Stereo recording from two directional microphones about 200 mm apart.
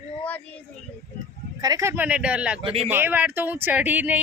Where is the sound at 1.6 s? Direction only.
15° right (ahead or behind).